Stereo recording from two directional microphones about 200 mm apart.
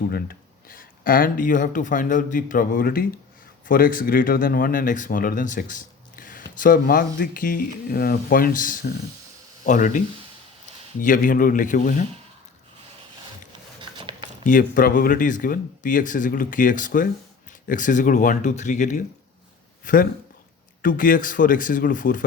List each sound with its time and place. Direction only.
0.1 s speech: 45° left (ahead or behind)
11.0 s speech: 40° left (ahead or behind)
14.0 s a sound: 25° right (ahead or behind)
14.4 s speech: 40° left (ahead or behind)